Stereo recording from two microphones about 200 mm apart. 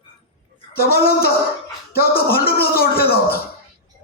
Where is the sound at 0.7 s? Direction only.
50° left (ahead or behind).